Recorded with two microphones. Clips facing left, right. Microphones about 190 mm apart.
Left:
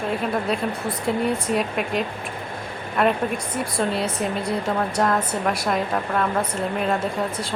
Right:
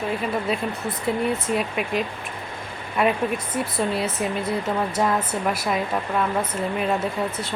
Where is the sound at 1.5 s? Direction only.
Centre (ahead or behind).